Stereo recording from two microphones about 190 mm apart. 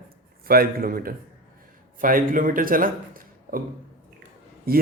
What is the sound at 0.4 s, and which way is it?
A man's voice, 50° right (ahead or behind).